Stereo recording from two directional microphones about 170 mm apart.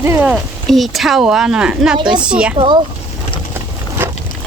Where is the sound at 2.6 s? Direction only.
25° right (ahead or behind).